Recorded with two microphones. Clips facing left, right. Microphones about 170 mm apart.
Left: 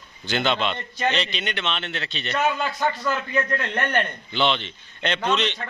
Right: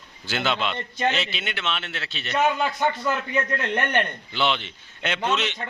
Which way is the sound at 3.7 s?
10° right (ahead or behind).